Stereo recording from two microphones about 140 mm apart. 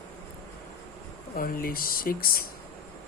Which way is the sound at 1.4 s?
90° left.